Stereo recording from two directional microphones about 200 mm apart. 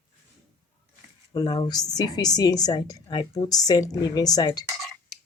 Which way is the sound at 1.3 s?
20° left (ahead or behind).